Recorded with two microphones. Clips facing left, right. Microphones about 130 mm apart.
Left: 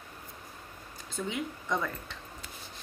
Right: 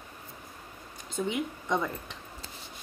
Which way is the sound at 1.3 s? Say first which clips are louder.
Right 2 dB; 20° right (ahead or behind).